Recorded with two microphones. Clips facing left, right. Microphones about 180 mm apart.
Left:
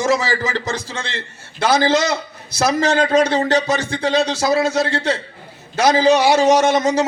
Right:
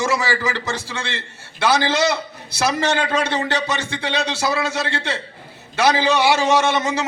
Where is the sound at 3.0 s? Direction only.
40° left (ahead or behind).